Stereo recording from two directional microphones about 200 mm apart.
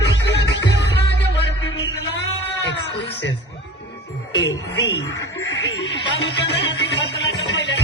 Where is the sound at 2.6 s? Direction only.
60° left (ahead or behind).